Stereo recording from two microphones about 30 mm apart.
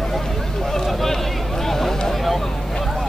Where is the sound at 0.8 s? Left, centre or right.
Centre.